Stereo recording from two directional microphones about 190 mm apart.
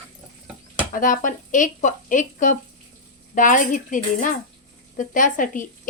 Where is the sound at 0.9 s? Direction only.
45° left (ahead or behind).